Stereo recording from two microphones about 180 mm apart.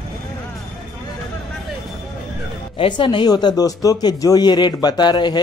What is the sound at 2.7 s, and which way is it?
Speech, 30° left (ahead or behind).